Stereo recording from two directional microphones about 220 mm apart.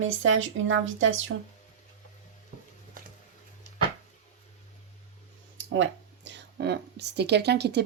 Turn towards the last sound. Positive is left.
turn(degrees=-50)  # may be behind; listen again after turning